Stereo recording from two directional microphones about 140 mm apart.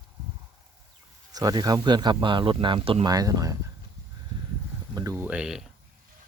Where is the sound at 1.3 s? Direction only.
30° right (ahead or behind).